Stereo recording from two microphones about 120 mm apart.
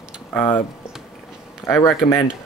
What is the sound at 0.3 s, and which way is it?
Speech, 15° left (ahead or behind).